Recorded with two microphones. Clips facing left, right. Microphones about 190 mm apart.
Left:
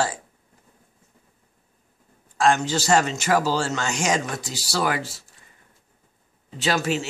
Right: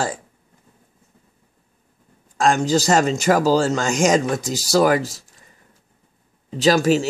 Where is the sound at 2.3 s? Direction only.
40° right (ahead or behind).